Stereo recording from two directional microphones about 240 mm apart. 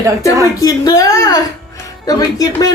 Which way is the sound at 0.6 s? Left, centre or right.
Centre.